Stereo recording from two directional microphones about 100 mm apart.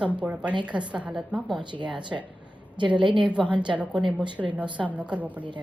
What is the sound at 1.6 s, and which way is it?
Speech, 50° right (ahead or behind).